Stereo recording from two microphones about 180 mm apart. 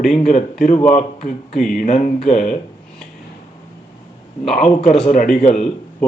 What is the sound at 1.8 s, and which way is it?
Speech, 40° left (ahead or behind).